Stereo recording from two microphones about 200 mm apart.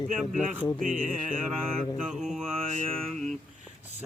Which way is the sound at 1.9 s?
Centre (ahead or behind).